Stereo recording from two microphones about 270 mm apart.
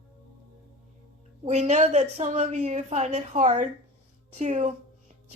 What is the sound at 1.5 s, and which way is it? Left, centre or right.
A woman's voice, right.